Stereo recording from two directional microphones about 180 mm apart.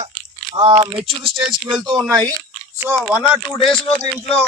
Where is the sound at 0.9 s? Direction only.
25° right (ahead or behind).